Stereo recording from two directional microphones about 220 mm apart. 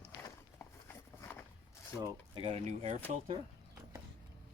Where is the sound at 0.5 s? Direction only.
10° left (ahead or behind).